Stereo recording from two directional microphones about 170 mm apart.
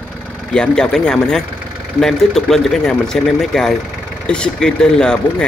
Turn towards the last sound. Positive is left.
turn(degrees=5)  # may be behind; listen again after turning